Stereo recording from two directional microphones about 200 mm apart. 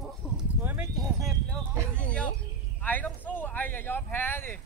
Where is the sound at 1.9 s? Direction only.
5° left (ahead or behind).